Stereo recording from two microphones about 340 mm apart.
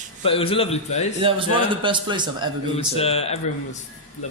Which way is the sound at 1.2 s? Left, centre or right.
Centre.